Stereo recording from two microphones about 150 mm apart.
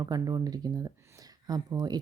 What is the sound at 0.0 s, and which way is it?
Speech, 25° right (ahead or behind).